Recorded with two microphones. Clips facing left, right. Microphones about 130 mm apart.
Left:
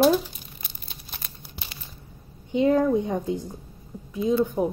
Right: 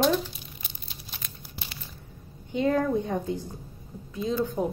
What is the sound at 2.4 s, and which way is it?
Speech, 20° left (ahead or behind).